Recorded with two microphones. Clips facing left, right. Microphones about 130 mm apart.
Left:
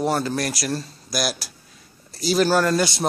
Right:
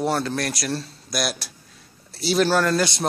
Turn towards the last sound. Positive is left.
turn(degrees=0)  # may be behind; listen again after turning